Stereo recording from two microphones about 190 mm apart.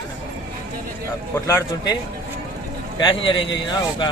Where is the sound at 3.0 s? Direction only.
25° left (ahead or behind).